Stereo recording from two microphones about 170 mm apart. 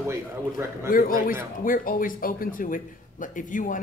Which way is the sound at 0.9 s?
55° left (ahead or behind).